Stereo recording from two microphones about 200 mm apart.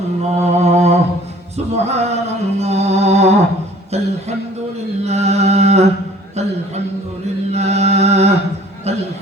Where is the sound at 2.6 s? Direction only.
35° right (ahead or behind).